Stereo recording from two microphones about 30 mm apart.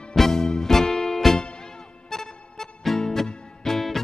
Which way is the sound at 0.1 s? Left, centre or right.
Centre.